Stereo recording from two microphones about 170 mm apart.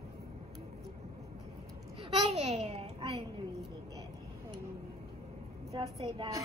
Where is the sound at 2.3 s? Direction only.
40° right (ahead or behind).